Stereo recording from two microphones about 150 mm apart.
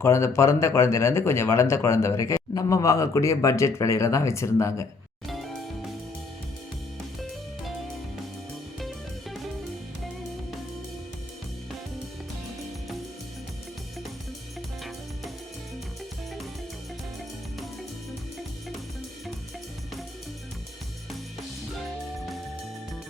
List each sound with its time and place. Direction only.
0.0 s speech: 20° left (ahead or behind)
7.2 s music: centre (ahead or behind)